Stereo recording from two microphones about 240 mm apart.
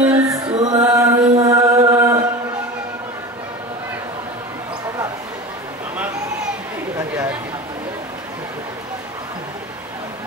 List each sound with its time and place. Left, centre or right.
0.0 s music: centre
1.4 s chant: centre